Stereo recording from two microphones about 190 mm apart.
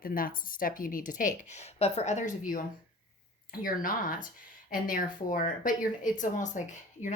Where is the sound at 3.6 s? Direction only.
45° left (ahead or behind).